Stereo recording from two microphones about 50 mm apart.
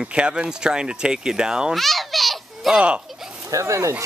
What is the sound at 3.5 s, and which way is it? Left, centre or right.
Speech, right.